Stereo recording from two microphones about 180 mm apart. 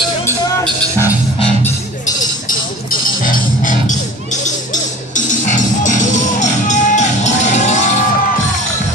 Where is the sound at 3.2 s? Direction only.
45° left (ahead or behind).